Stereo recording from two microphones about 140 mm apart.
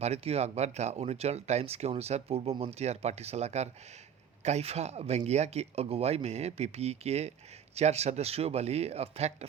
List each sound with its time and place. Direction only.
0.0 s speech: 50° right (ahead or behind)